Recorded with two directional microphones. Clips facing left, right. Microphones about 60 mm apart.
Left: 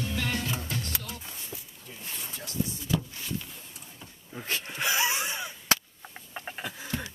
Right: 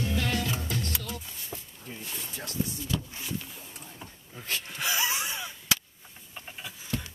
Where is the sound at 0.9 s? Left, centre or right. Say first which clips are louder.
Right 1 dB; centre.